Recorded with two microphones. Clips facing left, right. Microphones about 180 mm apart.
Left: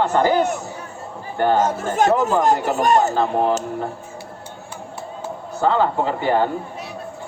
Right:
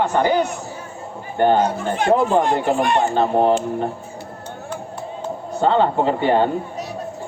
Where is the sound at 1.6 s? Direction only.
45° left (ahead or behind).